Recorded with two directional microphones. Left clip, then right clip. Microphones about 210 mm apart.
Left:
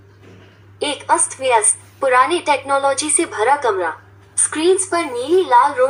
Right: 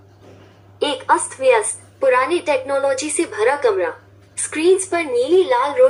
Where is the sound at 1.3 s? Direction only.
10° left (ahead or behind).